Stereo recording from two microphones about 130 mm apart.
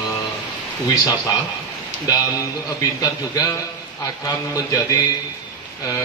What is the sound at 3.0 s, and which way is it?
Speech, 25° left (ahead or behind).